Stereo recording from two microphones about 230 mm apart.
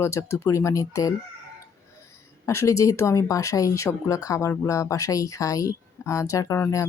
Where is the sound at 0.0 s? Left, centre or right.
Centre.